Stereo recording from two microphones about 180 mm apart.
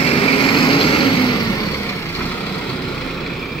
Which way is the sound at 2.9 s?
Centre (ahead or behind).